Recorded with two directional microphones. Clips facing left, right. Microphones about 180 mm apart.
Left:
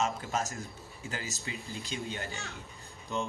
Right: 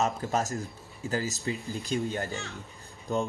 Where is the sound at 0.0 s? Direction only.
40° right (ahead or behind).